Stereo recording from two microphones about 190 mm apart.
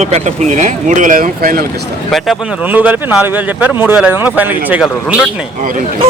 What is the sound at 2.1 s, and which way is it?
Speech, 5° right (ahead or behind).